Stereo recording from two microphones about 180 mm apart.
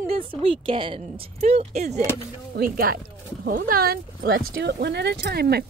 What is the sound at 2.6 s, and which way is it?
Speech, 60° right (ahead or behind).